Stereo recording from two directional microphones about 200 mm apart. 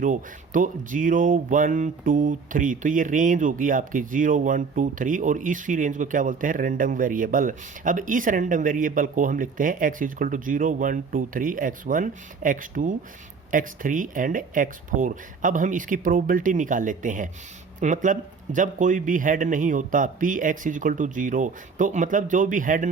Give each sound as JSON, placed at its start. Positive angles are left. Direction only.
{"t": 0.0, "sound": "speech", "side_deg": -40}